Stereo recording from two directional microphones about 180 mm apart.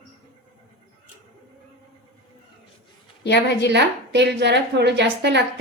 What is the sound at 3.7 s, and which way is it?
A woman's voice, 70° right (ahead or behind).